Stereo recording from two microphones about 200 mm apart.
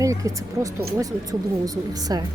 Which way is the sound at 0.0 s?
15° right (ahead or behind).